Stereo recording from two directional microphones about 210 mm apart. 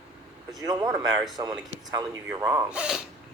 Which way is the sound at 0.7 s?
15° right (ahead or behind).